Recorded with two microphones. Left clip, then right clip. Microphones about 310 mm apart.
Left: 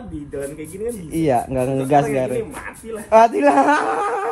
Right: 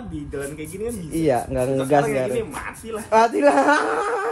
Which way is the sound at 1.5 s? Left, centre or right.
Left.